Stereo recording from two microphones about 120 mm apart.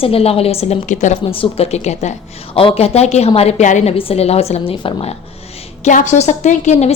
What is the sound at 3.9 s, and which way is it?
A woman's voice, 55° left (ahead or behind).